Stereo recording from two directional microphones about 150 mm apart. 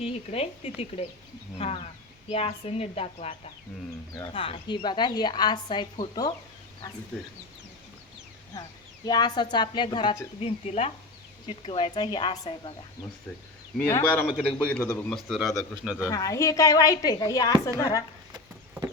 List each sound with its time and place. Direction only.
0.0 s a woman's voice: 40° left (ahead or behind)
4.1 s a woman's voice: 25° left (ahead or behind)
4.4 s a woman's voice: 40° left (ahead or behind)
9.0 s a woman's voice: 30° left (ahead or behind)
13.7 s a man's voice: 15° left (ahead or behind)
15.1 s speech: centre (ahead or behind)
16.0 s a woman's voice: 20° left (ahead or behind)